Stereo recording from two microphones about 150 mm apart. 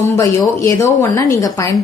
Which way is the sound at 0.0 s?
20° left (ahead or behind).